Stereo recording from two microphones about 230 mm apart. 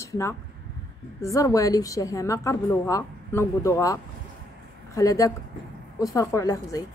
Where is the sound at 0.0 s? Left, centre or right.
Centre.